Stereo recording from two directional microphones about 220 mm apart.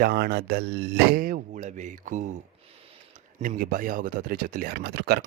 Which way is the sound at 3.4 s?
40° right (ahead or behind).